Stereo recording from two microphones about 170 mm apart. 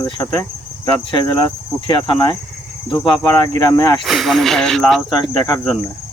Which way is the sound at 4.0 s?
Centre (ahead or behind).